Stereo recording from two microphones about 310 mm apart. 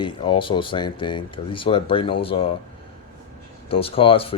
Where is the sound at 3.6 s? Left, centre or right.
Centre.